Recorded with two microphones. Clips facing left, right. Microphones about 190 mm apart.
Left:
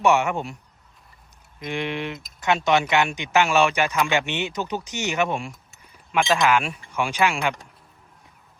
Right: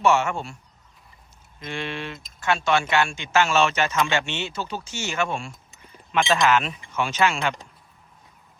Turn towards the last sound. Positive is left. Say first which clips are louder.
# even
turn(degrees=15)  # may be behind; listen again after turning